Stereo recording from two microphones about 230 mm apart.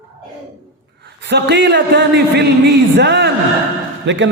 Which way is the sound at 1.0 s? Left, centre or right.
Right.